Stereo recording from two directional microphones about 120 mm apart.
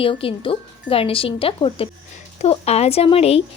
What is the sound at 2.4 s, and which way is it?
Speech, 60° left (ahead or behind).